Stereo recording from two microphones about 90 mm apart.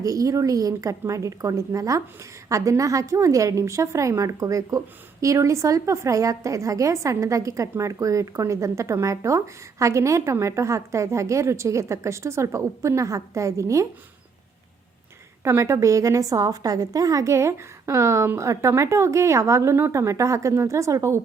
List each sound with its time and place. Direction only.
0.0 s a woman's voice: 40° right (ahead or behind)
15.4 s a woman's voice: 30° right (ahead or behind)